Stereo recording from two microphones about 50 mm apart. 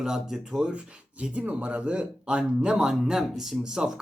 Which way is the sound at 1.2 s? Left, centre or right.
Right.